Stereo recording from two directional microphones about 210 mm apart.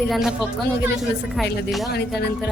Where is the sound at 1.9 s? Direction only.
50° left (ahead or behind).